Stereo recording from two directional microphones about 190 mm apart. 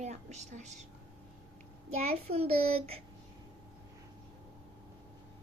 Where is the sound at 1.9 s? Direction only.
35° right (ahead or behind).